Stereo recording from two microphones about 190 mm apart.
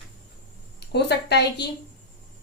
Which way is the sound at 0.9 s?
60° left (ahead or behind).